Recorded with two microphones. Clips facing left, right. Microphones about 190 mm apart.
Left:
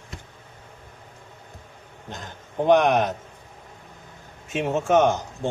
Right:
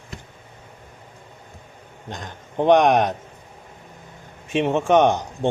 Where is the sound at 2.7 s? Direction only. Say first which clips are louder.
Right 2 dB; 70° right (ahead or behind).